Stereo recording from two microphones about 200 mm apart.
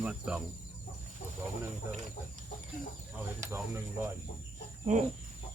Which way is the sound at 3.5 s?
15° right (ahead or behind).